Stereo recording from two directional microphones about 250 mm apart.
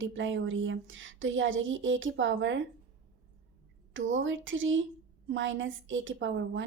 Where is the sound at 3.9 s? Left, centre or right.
Right.